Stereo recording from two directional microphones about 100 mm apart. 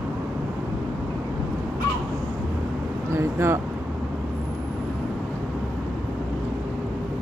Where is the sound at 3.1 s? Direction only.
25° right (ahead or behind).